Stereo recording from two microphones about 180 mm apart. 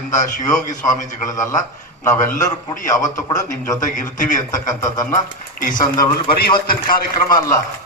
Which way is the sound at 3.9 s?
45° left (ahead or behind).